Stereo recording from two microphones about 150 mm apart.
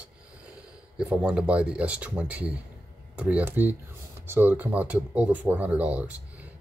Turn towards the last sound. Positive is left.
turn(degrees=-10)  # may be behind; listen again after turning